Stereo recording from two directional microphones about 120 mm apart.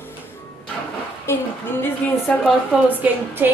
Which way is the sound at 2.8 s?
15° right (ahead or behind).